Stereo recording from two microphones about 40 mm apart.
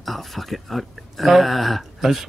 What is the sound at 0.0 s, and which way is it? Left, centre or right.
Speech, centre.